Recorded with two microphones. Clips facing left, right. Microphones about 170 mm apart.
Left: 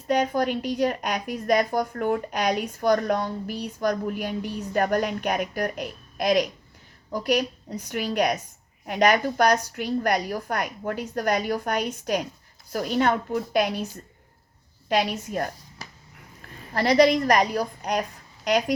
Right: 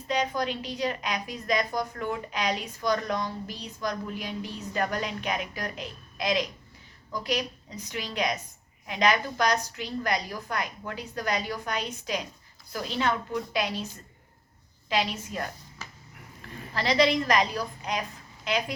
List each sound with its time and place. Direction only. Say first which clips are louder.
0.1 s a woman's voice: left 6 dB; 50° left (ahead or behind)
14.8 s a woman's voice: left 4 dB; 50° left (ahead or behind)